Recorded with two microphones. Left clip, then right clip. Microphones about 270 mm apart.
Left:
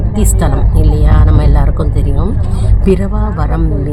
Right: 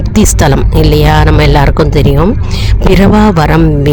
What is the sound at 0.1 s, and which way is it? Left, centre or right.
Speech, right.